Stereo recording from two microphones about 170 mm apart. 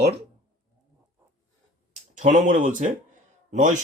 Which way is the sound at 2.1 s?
50° right (ahead or behind).